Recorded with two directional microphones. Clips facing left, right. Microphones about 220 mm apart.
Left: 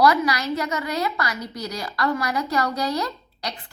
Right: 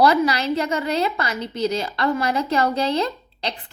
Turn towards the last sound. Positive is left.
turn(degrees=-25)  # may be behind; listen again after turning